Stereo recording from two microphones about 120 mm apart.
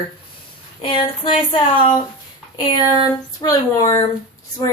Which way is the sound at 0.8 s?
45° left (ahead or behind).